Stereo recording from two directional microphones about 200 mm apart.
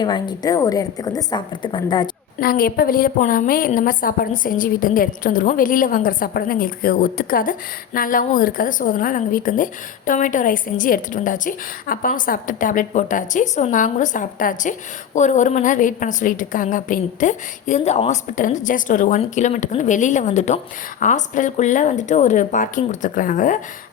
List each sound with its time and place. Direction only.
0.0 s a woman's voice: 20° left (ahead or behind)
2.4 s a woman's voice: 50° left (ahead or behind)